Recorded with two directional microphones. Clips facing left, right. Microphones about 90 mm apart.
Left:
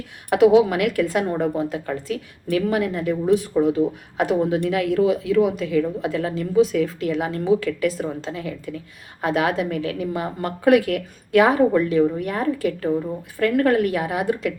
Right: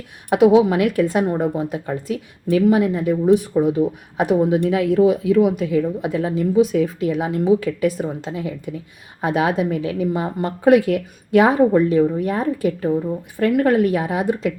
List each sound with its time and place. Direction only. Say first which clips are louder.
0.3 s speech: right 1 dB; 25° right (ahead or behind)